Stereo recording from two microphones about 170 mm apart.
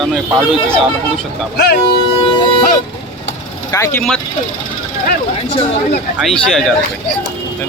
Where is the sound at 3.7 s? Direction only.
15° left (ahead or behind).